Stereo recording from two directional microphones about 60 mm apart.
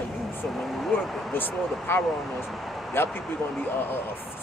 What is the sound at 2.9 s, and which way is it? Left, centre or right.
Speech, left.